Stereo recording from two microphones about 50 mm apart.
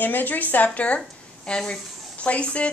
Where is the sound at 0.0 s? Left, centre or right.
Left.